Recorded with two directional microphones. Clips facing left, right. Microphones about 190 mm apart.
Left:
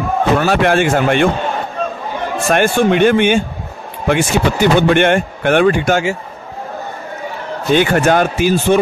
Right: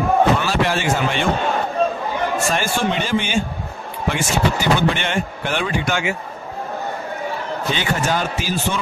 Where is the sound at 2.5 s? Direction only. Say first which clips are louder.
Left 8 dB; 60° left (ahead or behind).